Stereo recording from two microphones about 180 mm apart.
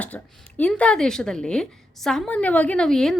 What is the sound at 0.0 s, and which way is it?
Speech, 10° left (ahead or behind).